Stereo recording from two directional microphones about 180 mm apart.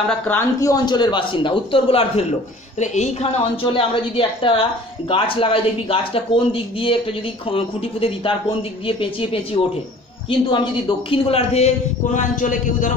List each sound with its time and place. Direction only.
0.3 s a man's voice: 15° left (ahead or behind); by 12.9 s 45° left (ahead or behind)